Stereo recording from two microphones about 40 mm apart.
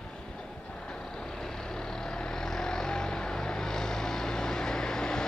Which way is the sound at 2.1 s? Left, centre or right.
Centre.